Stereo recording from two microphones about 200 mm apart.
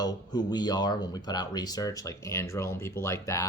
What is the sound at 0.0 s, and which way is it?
Speech, 20° left (ahead or behind).